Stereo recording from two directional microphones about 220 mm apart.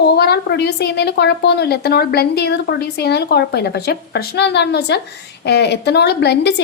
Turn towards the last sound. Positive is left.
turn(degrees=50)  # may be behind; listen again after turning